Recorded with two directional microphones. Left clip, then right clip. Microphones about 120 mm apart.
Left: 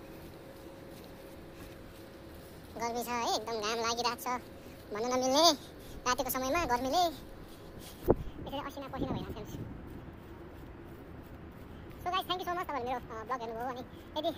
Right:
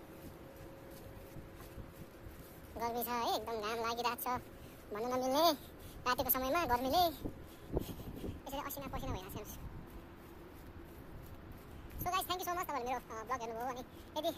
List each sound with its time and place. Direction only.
2.8 s speech: 25° right (ahead or behind)
4.9 s speech: 10° right (ahead or behind); by 7.2 s 25° right (ahead or behind)
8.5 s speech: 15° right (ahead or behind)
12.0 s speech: 10° right (ahead or behind)